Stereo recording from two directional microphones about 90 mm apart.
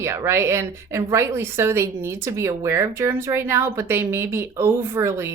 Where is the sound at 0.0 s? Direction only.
30° right (ahead or behind).